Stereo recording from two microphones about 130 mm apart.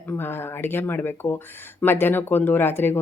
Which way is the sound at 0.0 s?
15° left (ahead or behind).